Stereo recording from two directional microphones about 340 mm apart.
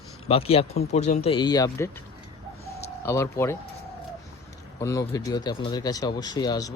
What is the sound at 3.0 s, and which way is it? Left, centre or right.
Speech, centre.